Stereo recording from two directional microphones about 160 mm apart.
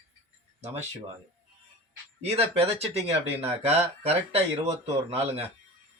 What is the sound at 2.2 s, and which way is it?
Speech, 40° right (ahead or behind).